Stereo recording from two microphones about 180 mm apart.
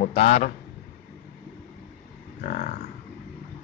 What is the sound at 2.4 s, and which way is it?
Speech, 45° left (ahead or behind).